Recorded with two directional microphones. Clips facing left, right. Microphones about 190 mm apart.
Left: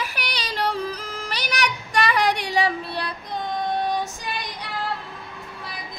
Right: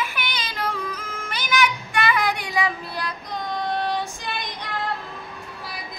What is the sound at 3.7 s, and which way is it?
Female singing, 15° left (ahead or behind).